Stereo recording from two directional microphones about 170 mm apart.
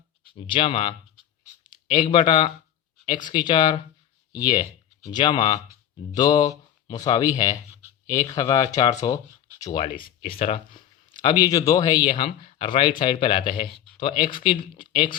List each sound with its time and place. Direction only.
0.3 s speech: 30° left (ahead or behind)
12.0 s speech: 40° left (ahead or behind)